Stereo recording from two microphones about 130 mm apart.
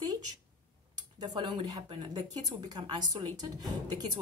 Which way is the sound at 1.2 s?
35° right (ahead or behind).